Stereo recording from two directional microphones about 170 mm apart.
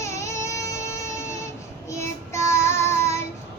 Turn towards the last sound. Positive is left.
turn(degrees=15)  # may be behind; listen again after turning